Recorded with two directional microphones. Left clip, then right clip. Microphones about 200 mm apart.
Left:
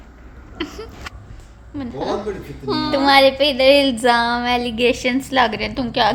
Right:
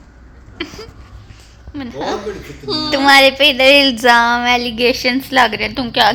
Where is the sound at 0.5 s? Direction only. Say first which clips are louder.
Right 1 dB; centre (ahead or behind).